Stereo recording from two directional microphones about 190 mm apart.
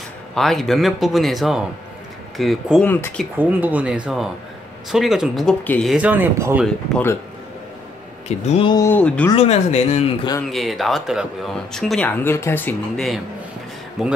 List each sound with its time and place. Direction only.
0.3 s speech: centre (ahead or behind)
3.3 s speech: 10° right (ahead or behind)
5.9 s speech: 10° right (ahead or behind)
6.6 s speech: 5° left (ahead or behind)
8.3 s speech: 30° left (ahead or behind)
8.7 s speech: 10° left (ahead or behind)
9.3 s speech: 35° left (ahead or behind)
10.5 s speech: centre (ahead or behind)
12.2 s speech: 15° left (ahead or behind)